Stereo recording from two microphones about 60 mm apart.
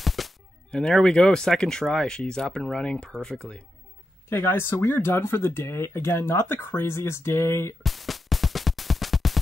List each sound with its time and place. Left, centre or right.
0.0 s music: centre
0.7 s speech: centre
4.3 s speech: left
7.8 s music: centre